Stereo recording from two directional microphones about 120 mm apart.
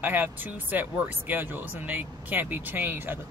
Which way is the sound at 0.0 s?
15° right (ahead or behind).